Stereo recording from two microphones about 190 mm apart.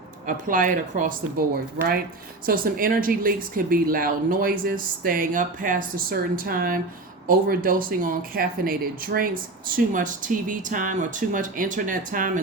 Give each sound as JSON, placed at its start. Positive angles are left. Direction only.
{"t": 0.3, "sound": "speech", "side_deg": -45}
{"t": 2.5, "sound": "speech", "side_deg": -50}